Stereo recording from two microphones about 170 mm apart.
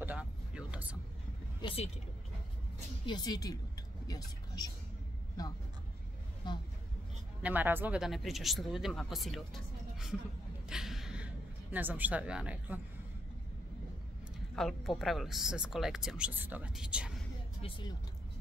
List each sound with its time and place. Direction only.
0.0 s a sound: 10° right (ahead or behind)
1.6 s speech: 30° left (ahead or behind)
3.1 s a woman's voice: 25° left (ahead or behind)
4.6 s a woman's voice: 20° left (ahead or behind)
7.4 s speech: 10° right (ahead or behind)
10.7 s a sound: centre (ahead or behind)
11.7 s speech: 10° right (ahead or behind)
14.5 s speech: centre (ahead or behind)
17.6 s speech: 30° left (ahead or behind)